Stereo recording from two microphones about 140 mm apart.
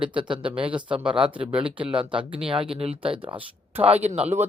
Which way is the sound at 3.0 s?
40° right (ahead or behind).